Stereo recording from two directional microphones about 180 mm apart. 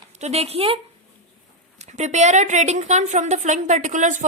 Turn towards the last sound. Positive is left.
turn(degrees=-45)  # may be behind; listen again after turning